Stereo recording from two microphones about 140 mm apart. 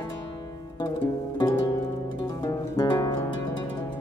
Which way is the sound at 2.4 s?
25° left (ahead or behind).